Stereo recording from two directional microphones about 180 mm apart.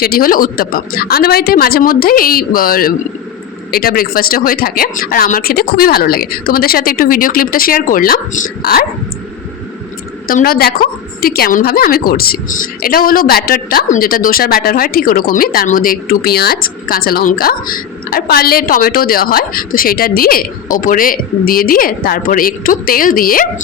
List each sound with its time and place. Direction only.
0.0 s speech: 55° left (ahead or behind)
10.2 s a woman's voice: 55° left (ahead or behind)